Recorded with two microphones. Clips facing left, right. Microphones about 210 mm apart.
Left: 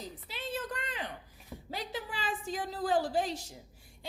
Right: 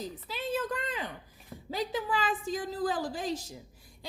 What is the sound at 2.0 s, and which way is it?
Child singing, 90° right.